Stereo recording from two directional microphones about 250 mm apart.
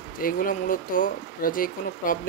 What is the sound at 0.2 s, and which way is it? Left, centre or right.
Speech, left.